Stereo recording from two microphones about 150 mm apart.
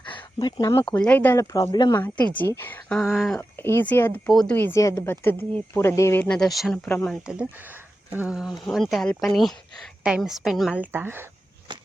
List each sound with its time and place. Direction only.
0.1 s a sound: 25° left (ahead or behind)
0.9 s speech: 10° left (ahead or behind); by 2.0 s 25° left (ahead or behind)
2.0 s speech: 10° left (ahead or behind)
3.6 s speech: 15° left (ahead or behind)
4.3 s speech: centre (ahead or behind)
4.5 s speech: 15° left (ahead or behind)
6.2 s speech: 5° left (ahead or behind)
7.3 s speech: 10° right (ahead or behind)
11.7 s walk: 30° right (ahead or behind)